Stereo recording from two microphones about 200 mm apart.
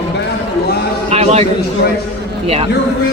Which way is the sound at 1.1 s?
30° right (ahead or behind).